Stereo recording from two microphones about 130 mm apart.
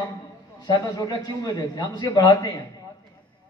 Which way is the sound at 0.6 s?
30° left (ahead or behind).